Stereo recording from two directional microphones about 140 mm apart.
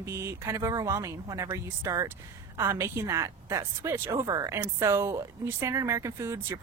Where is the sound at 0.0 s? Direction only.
20° right (ahead or behind).